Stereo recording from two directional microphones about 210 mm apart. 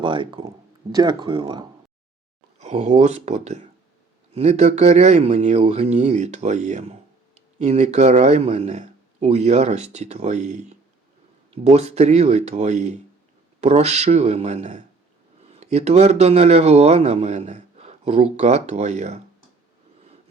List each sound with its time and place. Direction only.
0.0 s speech: 25° right (ahead or behind)